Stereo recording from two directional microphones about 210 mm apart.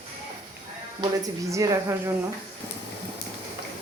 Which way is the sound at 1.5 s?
15° right (ahead or behind).